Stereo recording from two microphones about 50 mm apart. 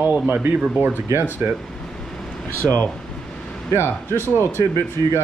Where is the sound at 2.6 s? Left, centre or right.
Right.